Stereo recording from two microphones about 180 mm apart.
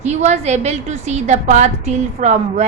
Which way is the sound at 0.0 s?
40° right (ahead or behind).